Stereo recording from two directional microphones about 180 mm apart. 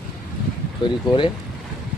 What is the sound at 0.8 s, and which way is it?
Speech, 25° left (ahead or behind).